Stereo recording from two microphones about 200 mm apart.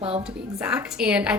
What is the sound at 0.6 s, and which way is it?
Speech, 5° right (ahead or behind).